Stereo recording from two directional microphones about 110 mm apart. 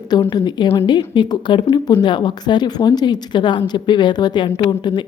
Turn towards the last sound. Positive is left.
turn(degrees=45)  # may be behind; listen again after turning